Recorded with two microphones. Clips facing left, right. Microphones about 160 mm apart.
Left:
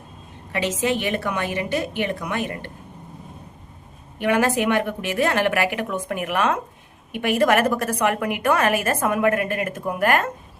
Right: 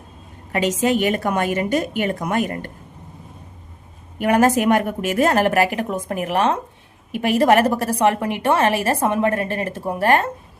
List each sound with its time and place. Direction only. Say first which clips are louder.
0.5 s a woman's voice: right 4 dB; 45° right (ahead or behind)
4.2 s a woman's voice: right 4 dB; 40° right (ahead or behind)